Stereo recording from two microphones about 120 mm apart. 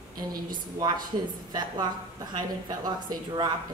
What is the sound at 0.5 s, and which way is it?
Speech, 40° right (ahead or behind).